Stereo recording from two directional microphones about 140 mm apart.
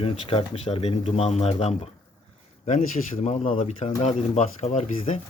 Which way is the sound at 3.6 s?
40° left (ahead or behind).